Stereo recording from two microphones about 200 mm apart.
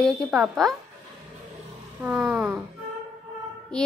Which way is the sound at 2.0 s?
10° right (ahead or behind).